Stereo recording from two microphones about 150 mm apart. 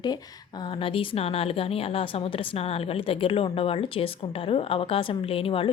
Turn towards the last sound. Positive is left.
turn(degrees=40)  # may be behind; listen again after turning